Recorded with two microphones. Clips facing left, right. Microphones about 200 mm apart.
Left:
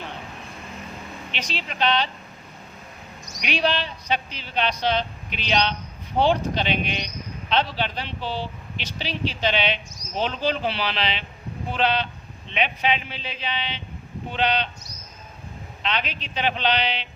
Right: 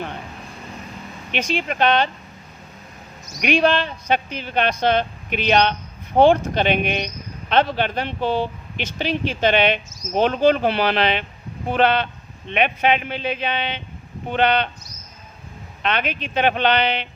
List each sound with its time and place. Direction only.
1.3 s speech: 50° right (ahead or behind)
3.4 s a man's voice: 50° right (ahead or behind)
15.8 s speech: 55° right (ahead or behind)